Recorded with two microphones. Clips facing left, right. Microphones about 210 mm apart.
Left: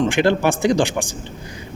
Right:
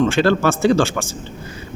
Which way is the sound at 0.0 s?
15° left (ahead or behind).